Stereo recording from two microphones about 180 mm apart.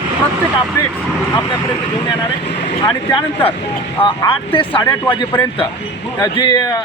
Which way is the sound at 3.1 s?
25° left (ahead or behind).